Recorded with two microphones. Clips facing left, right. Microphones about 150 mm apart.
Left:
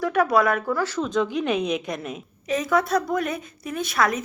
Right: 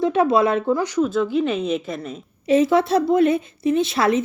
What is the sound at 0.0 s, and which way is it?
Speech, 25° right (ahead or behind).